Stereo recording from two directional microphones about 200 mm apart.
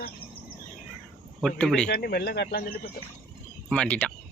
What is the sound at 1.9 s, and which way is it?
Speech, 50° left (ahead or behind).